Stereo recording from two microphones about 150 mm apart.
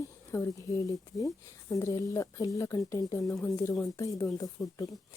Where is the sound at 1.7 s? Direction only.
20° left (ahead or behind).